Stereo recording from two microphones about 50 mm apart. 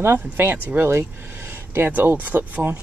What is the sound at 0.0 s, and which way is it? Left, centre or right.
Speech, right.